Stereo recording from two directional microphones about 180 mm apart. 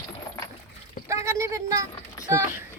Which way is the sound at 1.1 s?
15° right (ahead or behind).